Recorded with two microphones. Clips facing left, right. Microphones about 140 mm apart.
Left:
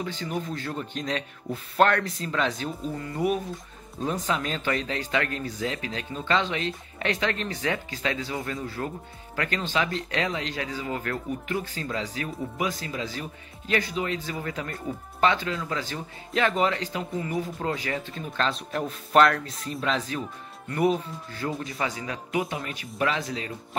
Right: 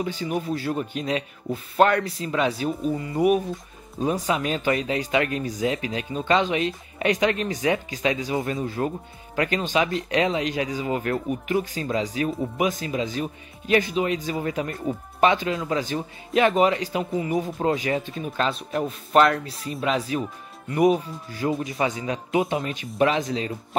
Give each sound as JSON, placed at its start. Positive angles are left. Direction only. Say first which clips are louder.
{"t": 0.0, "sound": "speech", "louder": "right 4 dB", "side_deg": -10}